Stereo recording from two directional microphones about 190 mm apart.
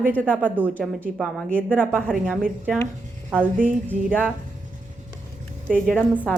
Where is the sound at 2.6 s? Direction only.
15° left (ahead or behind).